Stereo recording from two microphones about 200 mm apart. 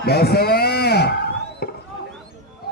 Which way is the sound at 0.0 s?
50° left (ahead or behind).